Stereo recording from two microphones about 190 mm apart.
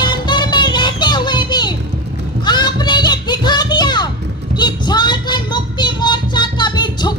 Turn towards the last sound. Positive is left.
turn(degrees=25)  # may be behind; listen again after turning